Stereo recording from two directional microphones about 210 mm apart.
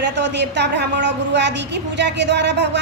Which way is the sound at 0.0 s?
55° right (ahead or behind).